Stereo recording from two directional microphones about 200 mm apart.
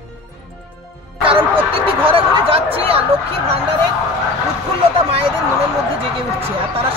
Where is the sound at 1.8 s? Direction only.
25° right (ahead or behind).